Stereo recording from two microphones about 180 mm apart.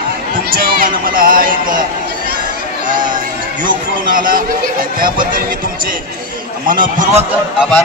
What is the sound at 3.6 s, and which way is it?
Speech, 50° right (ahead or behind).